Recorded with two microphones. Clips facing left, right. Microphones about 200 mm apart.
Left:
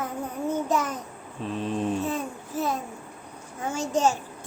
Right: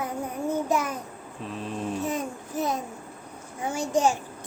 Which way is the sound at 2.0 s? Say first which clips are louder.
Even; 15° right (ahead or behind).